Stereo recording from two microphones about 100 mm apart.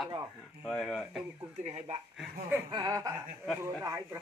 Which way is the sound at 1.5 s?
90° right.